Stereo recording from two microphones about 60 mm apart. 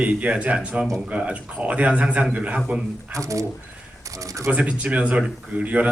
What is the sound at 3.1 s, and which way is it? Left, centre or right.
Speech, right.